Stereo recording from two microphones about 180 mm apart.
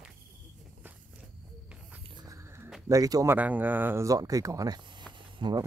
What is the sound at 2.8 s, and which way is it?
Speech, 20° right (ahead or behind).